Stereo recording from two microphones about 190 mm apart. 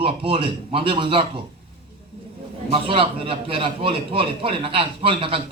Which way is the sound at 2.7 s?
30° right (ahead or behind).